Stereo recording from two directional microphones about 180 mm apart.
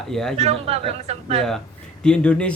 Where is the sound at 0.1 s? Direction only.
5° left (ahead or behind).